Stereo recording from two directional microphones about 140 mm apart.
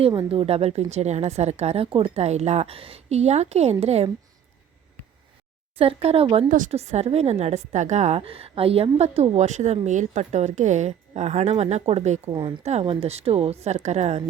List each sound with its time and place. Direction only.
0.1 s a woman's voice: 35° right (ahead or behind)
5.7 s a woman's voice: 45° right (ahead or behind)
12.3 s speech: 35° right (ahead or behind)
12.6 s a woman's voice: 45° right (ahead or behind)